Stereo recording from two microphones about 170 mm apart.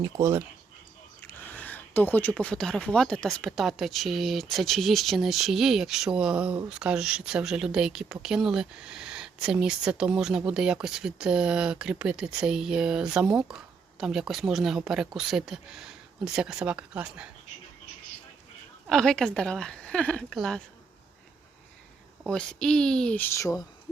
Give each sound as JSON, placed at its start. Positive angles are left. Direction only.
{"t": 0.0, "sound": "speech", "side_deg": -15}
{"t": 1.2, "sound": "speech", "side_deg": 10}
{"t": 18.9, "sound": "speech", "side_deg": 5}
{"t": 22.2, "sound": "speech", "side_deg": 5}